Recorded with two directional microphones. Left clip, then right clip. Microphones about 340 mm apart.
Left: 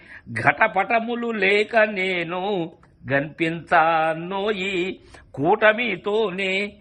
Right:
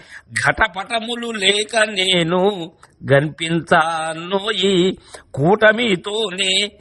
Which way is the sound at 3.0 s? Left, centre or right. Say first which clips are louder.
Right 6 dB; right.